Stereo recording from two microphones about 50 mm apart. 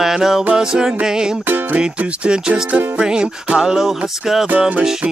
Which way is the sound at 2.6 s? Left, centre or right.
Right.